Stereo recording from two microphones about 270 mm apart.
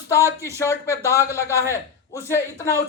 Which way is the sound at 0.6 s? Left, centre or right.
Centre.